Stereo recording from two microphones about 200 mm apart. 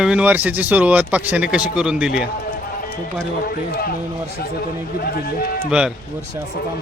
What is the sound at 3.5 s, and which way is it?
Speech, 50° left (ahead or behind).